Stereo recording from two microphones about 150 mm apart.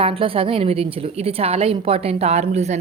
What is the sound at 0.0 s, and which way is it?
A woman's voice, 35° right (ahead or behind).